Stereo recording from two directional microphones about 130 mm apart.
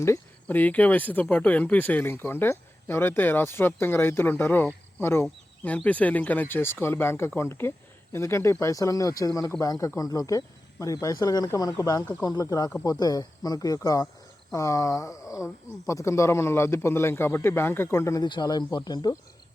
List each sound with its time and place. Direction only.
0.0 s speech: 15° left (ahead or behind)